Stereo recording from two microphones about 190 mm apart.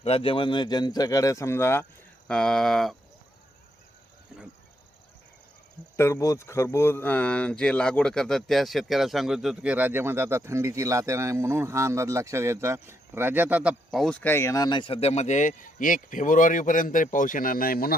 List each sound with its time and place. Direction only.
0.0 s a man's voice: 30° left (ahead or behind); by 2.9 s centre (ahead or behind)
6.0 s speech: 15° left (ahead or behind); by 17.9 s 50° left (ahead or behind)